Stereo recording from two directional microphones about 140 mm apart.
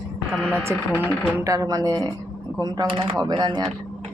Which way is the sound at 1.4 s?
25° right (ahead or behind).